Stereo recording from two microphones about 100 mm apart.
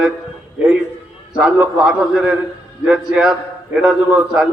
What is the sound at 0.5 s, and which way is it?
Speech, 10° right (ahead or behind).